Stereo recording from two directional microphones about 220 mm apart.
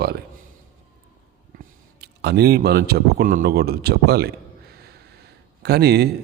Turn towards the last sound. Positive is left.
turn(degrees=-45)  # may be behind; listen again after turning